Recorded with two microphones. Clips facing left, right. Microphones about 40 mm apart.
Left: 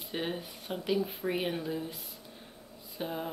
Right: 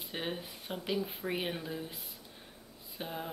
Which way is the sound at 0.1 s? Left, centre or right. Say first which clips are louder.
Left 3 dB; centre.